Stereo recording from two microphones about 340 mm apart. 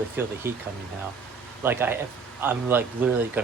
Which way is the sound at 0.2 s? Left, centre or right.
Centre.